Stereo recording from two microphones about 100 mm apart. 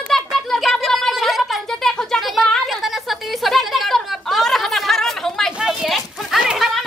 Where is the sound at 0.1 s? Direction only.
5° left (ahead or behind).